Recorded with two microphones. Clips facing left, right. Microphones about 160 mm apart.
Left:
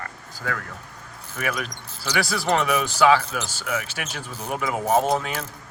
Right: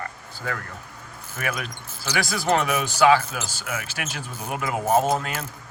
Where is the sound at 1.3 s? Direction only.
Centre (ahead or behind).